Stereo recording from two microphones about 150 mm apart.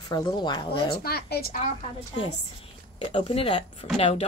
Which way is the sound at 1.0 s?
90° left.